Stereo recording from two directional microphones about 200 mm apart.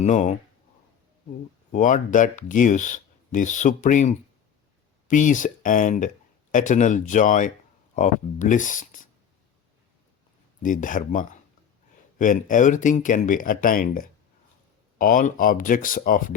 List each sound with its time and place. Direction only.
0.0 s speech: 35° left (ahead or behind)
1.7 s speech: 40° left (ahead or behind)
10.6 s speech: 40° left (ahead or behind)